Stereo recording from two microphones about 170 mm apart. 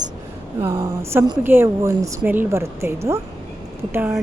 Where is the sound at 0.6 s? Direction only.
20° right (ahead or behind).